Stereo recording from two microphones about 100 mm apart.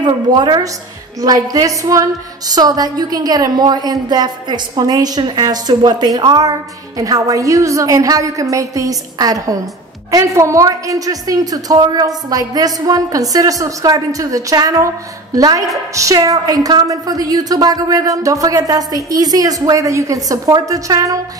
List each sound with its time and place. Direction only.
0.0 s a woman's voice: 45° right (ahead or behind)